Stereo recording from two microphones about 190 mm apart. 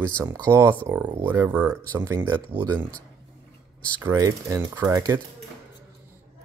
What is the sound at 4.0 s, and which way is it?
Speech, 15° right (ahead or behind).